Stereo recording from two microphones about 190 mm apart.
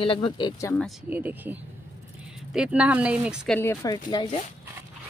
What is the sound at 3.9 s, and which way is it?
Speech, 25° left (ahead or behind).